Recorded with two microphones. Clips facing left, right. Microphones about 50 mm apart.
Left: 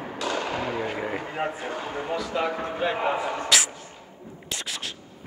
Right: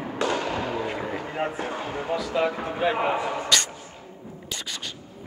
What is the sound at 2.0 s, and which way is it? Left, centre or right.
Speech, centre.